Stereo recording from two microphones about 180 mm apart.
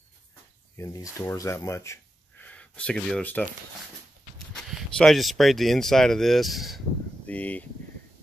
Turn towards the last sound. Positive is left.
turn(degrees=10)  # may be behind; listen again after turning